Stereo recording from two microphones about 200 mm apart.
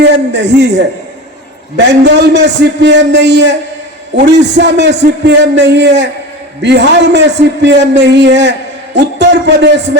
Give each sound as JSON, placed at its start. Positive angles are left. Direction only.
{"t": 0.0, "sound": "a man's voice", "side_deg": -60}